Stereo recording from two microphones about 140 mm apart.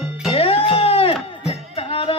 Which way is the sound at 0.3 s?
45° left (ahead or behind).